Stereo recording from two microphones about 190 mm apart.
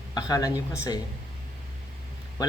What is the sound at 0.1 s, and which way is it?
Speech, 20° left (ahead or behind).